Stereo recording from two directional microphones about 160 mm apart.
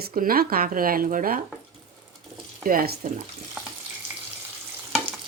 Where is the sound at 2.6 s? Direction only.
65° right (ahead or behind).